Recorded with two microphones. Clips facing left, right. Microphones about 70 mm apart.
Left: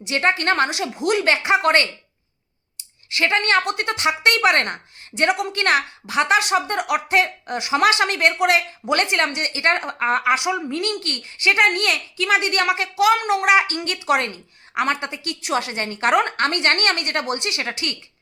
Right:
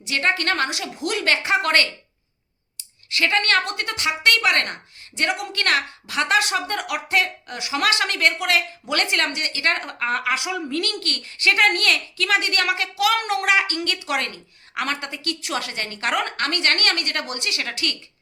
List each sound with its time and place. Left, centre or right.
0.0 s speech: left
3.1 s speech: left
13.7 s speech: left